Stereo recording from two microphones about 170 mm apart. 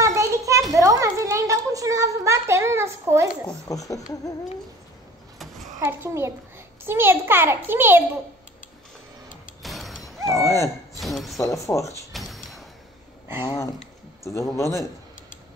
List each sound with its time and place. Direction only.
0.0 s a sound: 20° right (ahead or behind)
3.6 s speech: 20° left (ahead or behind)
5.4 s a sound: centre (ahead or behind)
5.9 s a child's voice: 15° right (ahead or behind)
9.6 s mechanisms: centre (ahead or behind)
10.2 s dog: 20° left (ahead or behind)
11.0 s speech: centre (ahead or behind)
11.3 s speech: 20° left (ahead or behind)
12.1 s a sound: centre (ahead or behind)
13.4 s speech: 30° left (ahead or behind)
14.2 s speech: 20° left (ahead or behind)